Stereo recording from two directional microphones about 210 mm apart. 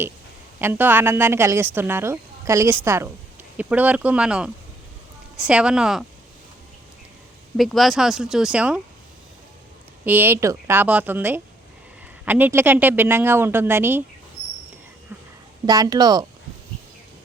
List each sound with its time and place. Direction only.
0.6 s a woman's voice: 10° right (ahead or behind)
7.5 s speech: centre (ahead or behind)
10.1 s a woman's voice: 10° right (ahead or behind)
15.6 s speech: 20° right (ahead or behind)